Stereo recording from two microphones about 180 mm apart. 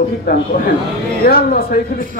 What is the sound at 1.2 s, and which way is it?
Speech, 55° left (ahead or behind).